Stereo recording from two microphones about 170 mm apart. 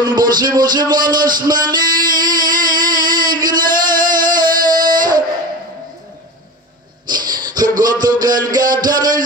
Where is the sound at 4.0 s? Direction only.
25° right (ahead or behind).